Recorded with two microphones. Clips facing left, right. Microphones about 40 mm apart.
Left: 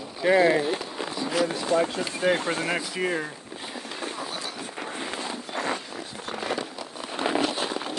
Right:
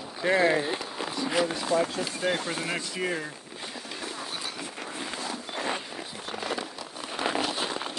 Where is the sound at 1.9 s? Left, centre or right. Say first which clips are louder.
Left 4 dB; centre.